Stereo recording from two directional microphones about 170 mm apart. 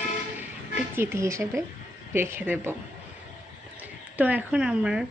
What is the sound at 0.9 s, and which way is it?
A woman's voice, 15° right (ahead or behind).